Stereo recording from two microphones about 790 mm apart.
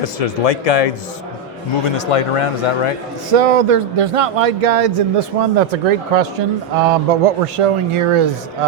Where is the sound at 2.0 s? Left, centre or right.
Left.